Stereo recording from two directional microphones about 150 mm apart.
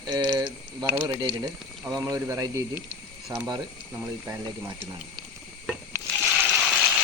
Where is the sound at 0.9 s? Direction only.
15° right (ahead or behind).